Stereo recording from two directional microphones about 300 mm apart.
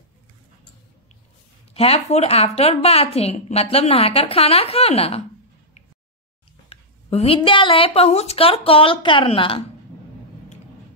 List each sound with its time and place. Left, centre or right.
1.7 s a woman's voice: centre
6.7 s speech: centre